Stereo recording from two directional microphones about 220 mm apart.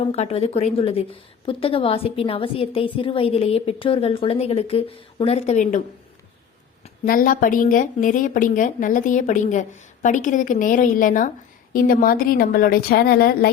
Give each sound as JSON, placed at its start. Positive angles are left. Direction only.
{"t": 0.0, "sound": "a woman's voice", "side_deg": 30}
{"t": 6.8, "sound": "a woman's voice", "side_deg": 40}